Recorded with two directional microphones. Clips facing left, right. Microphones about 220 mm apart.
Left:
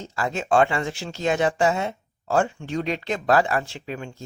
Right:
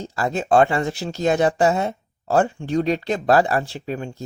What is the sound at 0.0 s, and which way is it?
Speech, 35° right (ahead or behind).